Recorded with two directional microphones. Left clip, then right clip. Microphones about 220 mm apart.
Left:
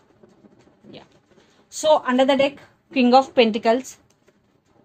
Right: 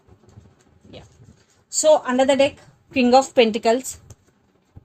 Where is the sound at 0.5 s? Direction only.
30° right (ahead or behind).